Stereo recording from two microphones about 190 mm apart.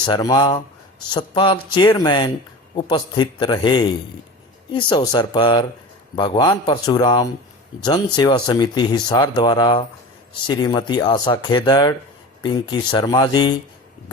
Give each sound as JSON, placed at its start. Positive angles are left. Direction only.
{"t": 0.0, "sound": "speech", "side_deg": 20}